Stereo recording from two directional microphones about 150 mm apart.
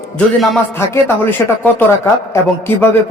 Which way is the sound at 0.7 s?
15° left (ahead or behind).